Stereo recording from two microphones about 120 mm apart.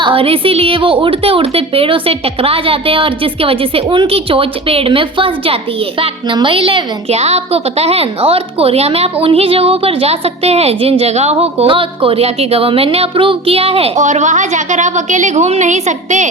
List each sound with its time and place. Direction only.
0.0 s a woman's voice: 50° right (ahead or behind)
14.0 s a woman's voice: 85° right